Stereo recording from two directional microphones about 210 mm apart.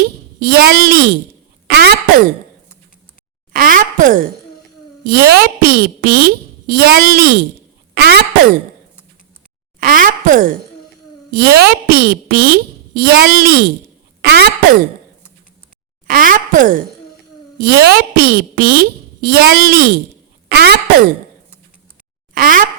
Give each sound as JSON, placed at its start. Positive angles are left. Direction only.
{"t": 0.3, "sound": "speech", "side_deg": -45}
{"t": 3.5, "sound": "speech", "side_deg": -40}
{"t": 9.8, "sound": "speech", "side_deg": -40}
{"t": 16.0, "sound": "speech", "side_deg": -40}
{"t": 22.4, "sound": "a sound", "side_deg": -40}